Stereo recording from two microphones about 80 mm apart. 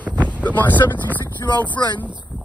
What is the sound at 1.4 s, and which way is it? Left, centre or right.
Speech, left.